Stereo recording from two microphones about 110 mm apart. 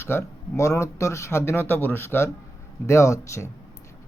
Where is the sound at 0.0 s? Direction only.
25° left (ahead or behind).